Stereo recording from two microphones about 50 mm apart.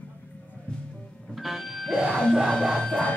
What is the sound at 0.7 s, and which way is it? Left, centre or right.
Music, centre.